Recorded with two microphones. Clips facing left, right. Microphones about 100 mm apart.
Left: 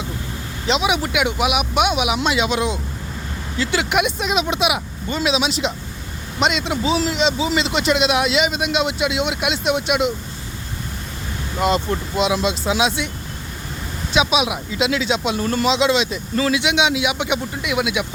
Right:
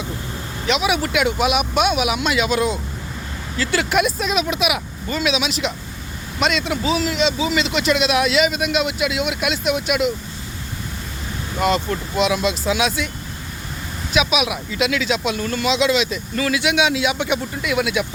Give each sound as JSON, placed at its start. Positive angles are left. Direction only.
{"t": 0.7, "sound": "speech", "side_deg": 20}
{"t": 11.6, "sound": "speech", "side_deg": 25}
{"t": 14.1, "sound": "speech", "side_deg": 25}